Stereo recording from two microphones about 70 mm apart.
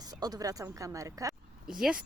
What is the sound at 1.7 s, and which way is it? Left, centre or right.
Speech, centre.